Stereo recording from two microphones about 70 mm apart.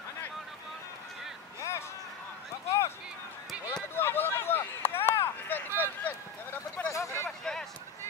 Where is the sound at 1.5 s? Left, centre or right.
Left.